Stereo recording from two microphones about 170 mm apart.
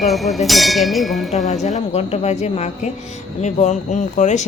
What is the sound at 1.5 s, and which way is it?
Speech, 45° left (ahead or behind).